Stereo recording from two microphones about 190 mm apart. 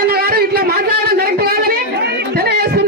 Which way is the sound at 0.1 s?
55° right (ahead or behind).